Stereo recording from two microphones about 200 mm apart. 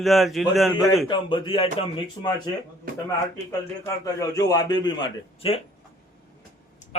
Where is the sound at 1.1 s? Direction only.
25° left (ahead or behind).